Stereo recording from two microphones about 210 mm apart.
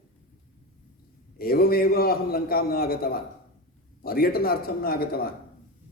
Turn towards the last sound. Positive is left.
turn(degrees=45)  # may be behind; listen again after turning